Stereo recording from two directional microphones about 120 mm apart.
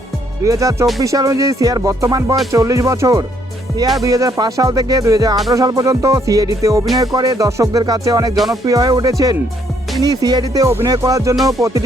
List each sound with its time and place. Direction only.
0.4 s music: 25° right (ahead or behind)
4.0 s speech: 30° right (ahead or behind)
5.5 s music: 30° right (ahead or behind)
8.6 s speech: 30° right (ahead or behind)
10.9 s music: 30° right (ahead or behind)